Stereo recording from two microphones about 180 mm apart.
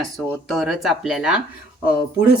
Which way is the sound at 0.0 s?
Centre (ahead or behind).